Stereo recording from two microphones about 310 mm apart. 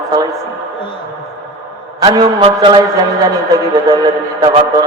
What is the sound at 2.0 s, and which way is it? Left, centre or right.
Speech, centre.